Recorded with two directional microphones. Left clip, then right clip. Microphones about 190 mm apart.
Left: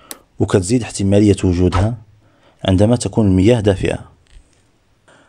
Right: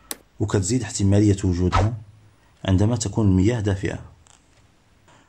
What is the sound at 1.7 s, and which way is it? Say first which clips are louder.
Speech: left 3 dB; centre (ahead or behind).